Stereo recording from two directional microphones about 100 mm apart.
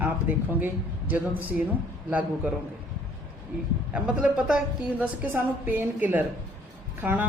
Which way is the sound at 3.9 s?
15° right (ahead or behind).